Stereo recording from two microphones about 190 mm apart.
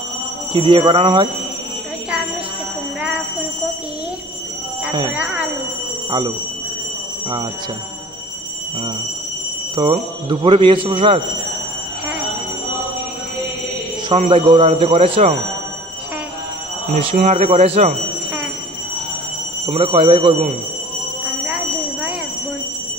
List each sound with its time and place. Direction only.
0.5 s speech: 25° right (ahead or behind)
5.1 s alarm: 10° right (ahead or behind)
6.0 s speech: 25° right (ahead or behind)
9.8 s speech: 25° right (ahead or behind)
14.3 s speech: 25° right (ahead or behind)
16.9 s speech: 40° right (ahead or behind)
19.6 s speech: 30° right (ahead or behind)